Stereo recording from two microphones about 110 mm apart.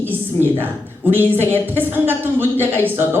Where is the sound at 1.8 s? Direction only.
20° right (ahead or behind).